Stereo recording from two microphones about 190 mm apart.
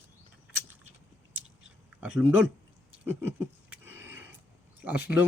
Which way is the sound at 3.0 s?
10° right (ahead or behind).